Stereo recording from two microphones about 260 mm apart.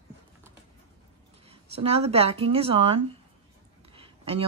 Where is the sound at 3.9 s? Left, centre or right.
Right.